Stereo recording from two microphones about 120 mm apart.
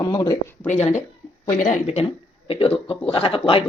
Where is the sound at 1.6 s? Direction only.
75° left (ahead or behind).